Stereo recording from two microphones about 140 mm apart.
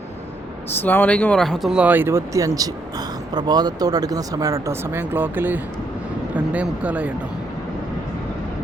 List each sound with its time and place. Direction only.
0.8 s speech: 15° left (ahead or behind); by 7.1 s 10° right (ahead or behind)